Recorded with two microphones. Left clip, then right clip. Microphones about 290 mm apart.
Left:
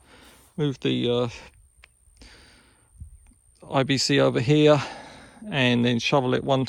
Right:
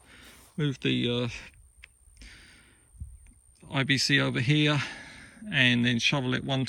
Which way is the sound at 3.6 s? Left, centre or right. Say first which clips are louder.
Left 4 dB; centre.